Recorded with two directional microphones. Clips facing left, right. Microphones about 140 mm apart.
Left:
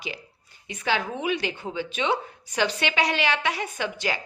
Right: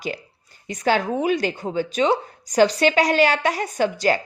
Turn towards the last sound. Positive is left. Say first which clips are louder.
# right 9 dB
turn(degrees=-40)  # may be behind; listen again after turning